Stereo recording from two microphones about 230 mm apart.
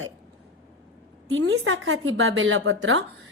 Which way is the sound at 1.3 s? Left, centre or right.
Right.